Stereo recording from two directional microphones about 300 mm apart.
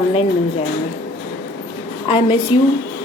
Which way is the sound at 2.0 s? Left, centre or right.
Centre.